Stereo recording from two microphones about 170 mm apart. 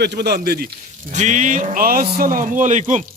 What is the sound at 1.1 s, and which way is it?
A man's voice, 45° right (ahead or behind).